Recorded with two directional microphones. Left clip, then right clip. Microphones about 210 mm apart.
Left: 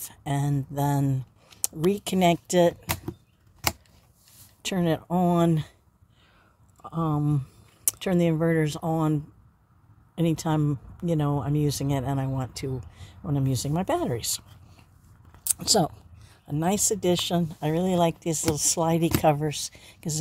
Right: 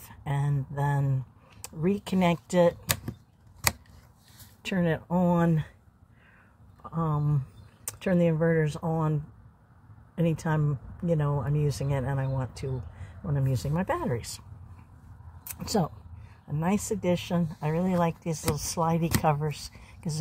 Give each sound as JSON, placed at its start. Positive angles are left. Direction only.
{"t": 0.0, "sound": "speech", "side_deg": 30}
{"t": 4.7, "sound": "speech", "side_deg": 30}
{"t": 6.8, "sound": "speech", "side_deg": 30}
{"t": 15.6, "sound": "speech", "side_deg": 20}
{"t": 16.5, "sound": "speech", "side_deg": 30}